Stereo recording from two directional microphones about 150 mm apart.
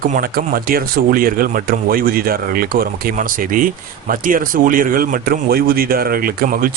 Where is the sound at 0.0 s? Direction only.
70° right (ahead or behind).